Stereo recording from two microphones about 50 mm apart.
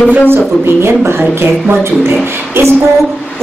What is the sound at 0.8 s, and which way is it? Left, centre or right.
A woman's voice, right.